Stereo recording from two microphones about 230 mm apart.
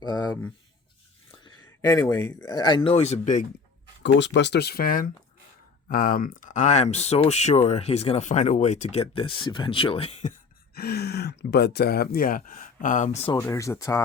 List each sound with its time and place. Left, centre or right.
0.0 s a sound: centre
1.5 s speech: centre
4.0 s speech: left
10.8 s speech: left
13.3 s speech: centre